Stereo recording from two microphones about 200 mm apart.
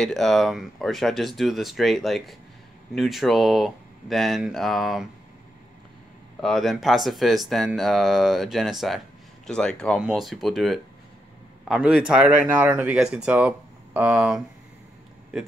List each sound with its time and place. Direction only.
0.0 s speech: centre (ahead or behind)
6.4 s speech: centre (ahead or behind)